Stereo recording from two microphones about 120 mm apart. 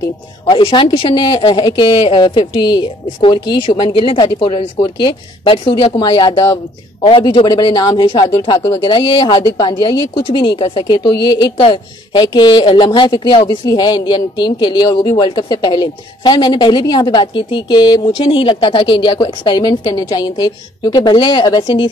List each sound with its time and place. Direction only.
0.5 s speech: 45° left (ahead or behind)
18.2 s speech: 45° left (ahead or behind)